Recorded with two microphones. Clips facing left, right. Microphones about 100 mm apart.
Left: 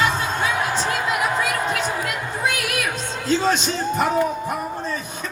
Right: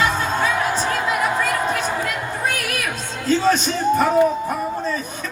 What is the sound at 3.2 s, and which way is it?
Speech, 20° left (ahead or behind).